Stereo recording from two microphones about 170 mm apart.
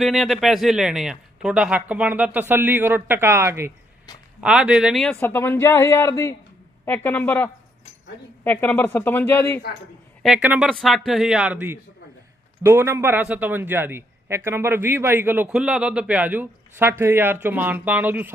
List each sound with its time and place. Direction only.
0.0 s a man's voice: centre (ahead or behind)
5.2 s speech: 15° left (ahead or behind)
10.2 s a man's voice: 5° right (ahead or behind)